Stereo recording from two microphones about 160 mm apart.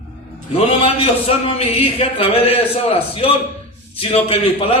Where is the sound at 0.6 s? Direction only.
35° left (ahead or behind).